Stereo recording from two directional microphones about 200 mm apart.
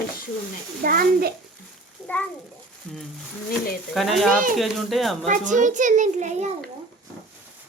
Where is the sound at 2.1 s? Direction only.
10° left (ahead or behind).